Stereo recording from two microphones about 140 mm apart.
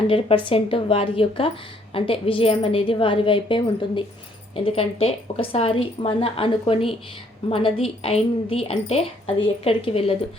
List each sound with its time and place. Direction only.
0.1 s a woman's voice: 40° left (ahead or behind)